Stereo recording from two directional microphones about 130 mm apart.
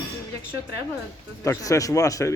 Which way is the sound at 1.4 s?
25° left (ahead or behind).